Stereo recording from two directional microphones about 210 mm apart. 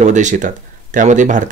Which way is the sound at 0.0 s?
35° right (ahead or behind).